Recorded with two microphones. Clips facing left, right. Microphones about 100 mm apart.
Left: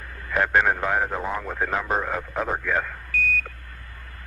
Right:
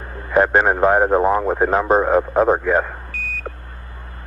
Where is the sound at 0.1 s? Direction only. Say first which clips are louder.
Right 7 dB; 30° right (ahead or behind).